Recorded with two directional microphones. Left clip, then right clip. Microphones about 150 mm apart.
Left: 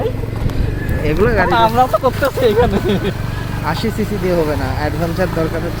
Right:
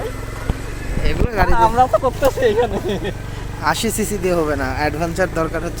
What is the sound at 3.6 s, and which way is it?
Speech, 90° right.